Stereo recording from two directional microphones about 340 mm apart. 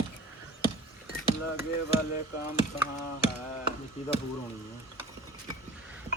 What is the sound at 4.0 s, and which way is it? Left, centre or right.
Speech, centre.